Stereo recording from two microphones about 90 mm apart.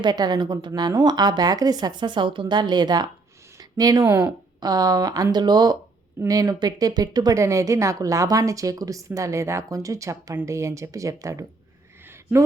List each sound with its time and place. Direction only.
0.0 s a woman's voice: 50° right (ahead or behind)
3.6 s a sound: 45° right (ahead or behind)
4.6 s a woman's voice: 45° right (ahead or behind)
6.1 s a woman's voice: 40° right (ahead or behind)
7.3 s speech: 35° right (ahead or behind)